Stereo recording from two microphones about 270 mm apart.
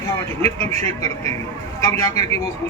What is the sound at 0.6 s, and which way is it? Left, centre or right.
A man's voice, centre.